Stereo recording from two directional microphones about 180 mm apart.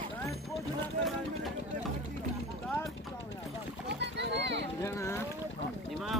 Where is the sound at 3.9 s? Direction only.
70° right (ahead or behind).